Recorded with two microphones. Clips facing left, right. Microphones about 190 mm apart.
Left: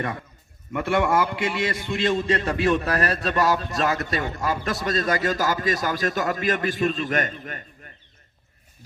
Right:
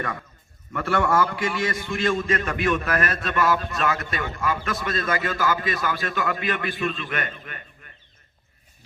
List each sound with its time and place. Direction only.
0.7 s a man's voice: 20° left (ahead or behind); by 7.6 s 40° left (ahead or behind)